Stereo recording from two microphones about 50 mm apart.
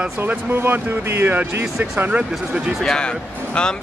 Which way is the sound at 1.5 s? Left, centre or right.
Right.